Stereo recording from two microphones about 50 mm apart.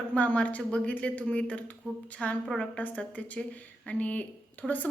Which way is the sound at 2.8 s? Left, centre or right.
Left.